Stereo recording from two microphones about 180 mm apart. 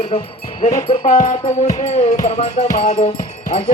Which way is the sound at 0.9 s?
35° left (ahead or behind).